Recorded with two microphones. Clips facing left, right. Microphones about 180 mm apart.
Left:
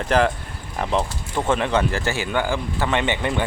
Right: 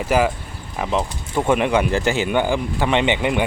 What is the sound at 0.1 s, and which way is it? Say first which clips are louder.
Speech: right 1 dB; 10° right (ahead or behind).